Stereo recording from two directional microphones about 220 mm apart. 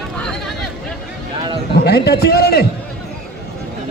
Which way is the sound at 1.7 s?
45° left (ahead or behind).